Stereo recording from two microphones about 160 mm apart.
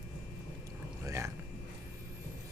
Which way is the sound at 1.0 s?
20° right (ahead or behind).